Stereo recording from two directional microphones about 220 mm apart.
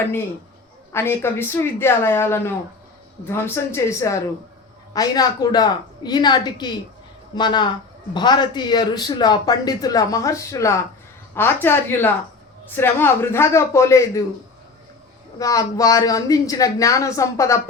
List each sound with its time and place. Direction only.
0.9 s a man's voice: 10° left (ahead or behind)
15.4 s speech: 15° left (ahead or behind)